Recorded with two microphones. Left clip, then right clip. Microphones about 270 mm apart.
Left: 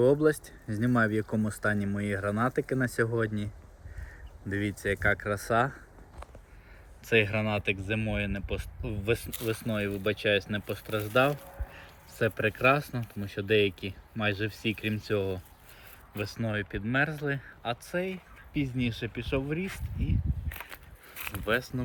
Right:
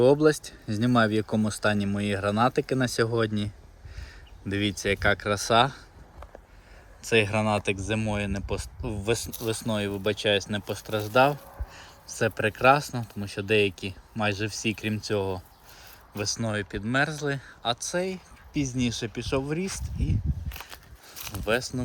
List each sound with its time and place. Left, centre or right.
0.0 s speech: centre
7.0 s speech: centre